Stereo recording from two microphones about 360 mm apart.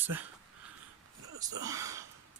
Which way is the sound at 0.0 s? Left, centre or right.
Centre.